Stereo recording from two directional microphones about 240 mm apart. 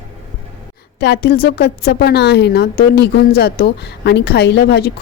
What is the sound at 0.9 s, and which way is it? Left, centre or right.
A woman's voice, left.